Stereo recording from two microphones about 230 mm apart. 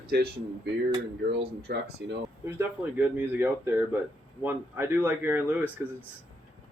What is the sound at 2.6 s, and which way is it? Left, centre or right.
A man's voice, centre.